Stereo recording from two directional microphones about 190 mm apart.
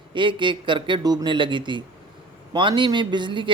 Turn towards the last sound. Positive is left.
turn(degrees=-25)  # may be behind; listen again after turning